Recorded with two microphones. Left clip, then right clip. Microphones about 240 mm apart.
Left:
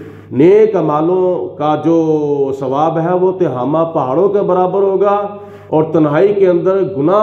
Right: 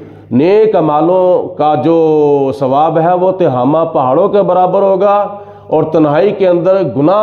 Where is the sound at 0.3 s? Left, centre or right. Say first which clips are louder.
Even; right.